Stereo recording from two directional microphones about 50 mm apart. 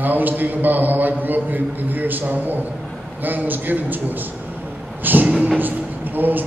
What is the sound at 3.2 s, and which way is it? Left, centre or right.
A man's voice, right.